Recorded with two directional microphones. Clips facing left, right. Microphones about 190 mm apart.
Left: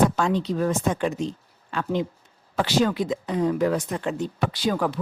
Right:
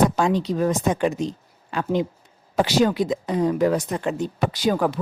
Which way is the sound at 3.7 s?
35° right (ahead or behind).